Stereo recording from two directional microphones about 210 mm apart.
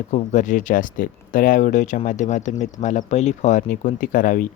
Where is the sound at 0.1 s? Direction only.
35° left (ahead or behind).